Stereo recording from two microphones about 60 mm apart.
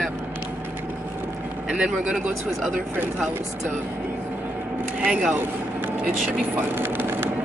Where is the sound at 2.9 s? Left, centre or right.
Right.